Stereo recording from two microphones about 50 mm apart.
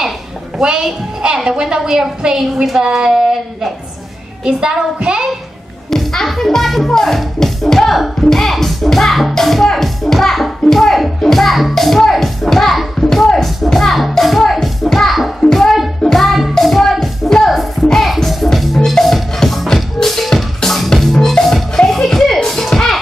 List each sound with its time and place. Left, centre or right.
0.6 s a woman's voice: centre
5.9 s speech: centre
15.4 s a sound: centre
16.0 s music: centre
16.5 s speech: centre
18.0 s music: centre